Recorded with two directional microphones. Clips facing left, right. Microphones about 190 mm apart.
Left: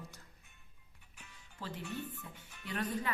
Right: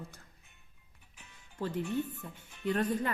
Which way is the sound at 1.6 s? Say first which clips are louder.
Right 9 dB; 55° right (ahead or behind).